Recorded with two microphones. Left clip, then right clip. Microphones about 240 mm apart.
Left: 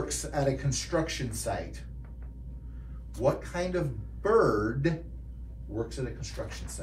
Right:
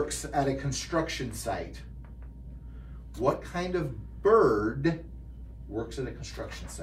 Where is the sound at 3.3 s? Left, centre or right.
Right.